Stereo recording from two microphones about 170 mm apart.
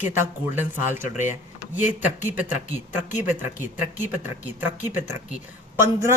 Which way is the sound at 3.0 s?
45° left (ahead or behind).